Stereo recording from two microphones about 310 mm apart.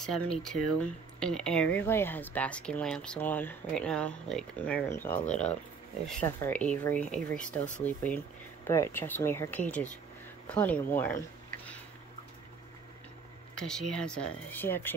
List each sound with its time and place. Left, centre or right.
0.1 s speech: centre
5.2 s speech: left
6.0 s speech: centre
11.5 s a sound: centre
13.6 s speech: centre